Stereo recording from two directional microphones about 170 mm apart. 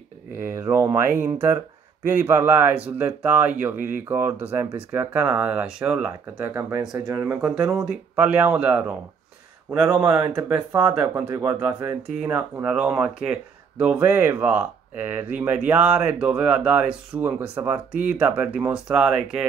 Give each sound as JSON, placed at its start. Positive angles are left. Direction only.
{"t": 0.3, "sound": "speech", "side_deg": -15}
{"t": 3.7, "sound": "speech", "side_deg": -50}
{"t": 4.1, "sound": "speech", "side_deg": -10}
{"t": 7.5, "sound": "speech", "side_deg": -5}